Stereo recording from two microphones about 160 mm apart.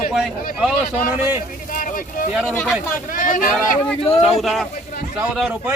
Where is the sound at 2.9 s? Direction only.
60° left (ahead or behind).